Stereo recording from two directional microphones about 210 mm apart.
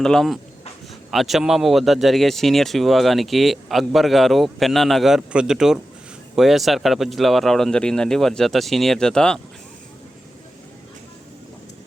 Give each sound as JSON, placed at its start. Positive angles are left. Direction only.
{"t": 0.0, "sound": "speech", "side_deg": 5}